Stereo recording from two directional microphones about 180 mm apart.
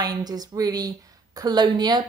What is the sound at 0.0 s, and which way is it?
A woman's voice, 20° right (ahead or behind).